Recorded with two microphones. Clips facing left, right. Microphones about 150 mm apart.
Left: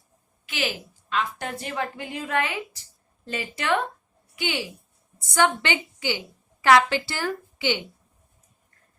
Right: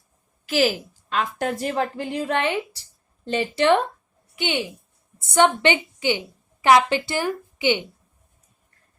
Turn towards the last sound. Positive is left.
turn(degrees=-20)  # may be behind; listen again after turning